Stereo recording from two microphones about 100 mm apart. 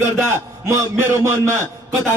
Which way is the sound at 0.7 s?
30° right (ahead or behind).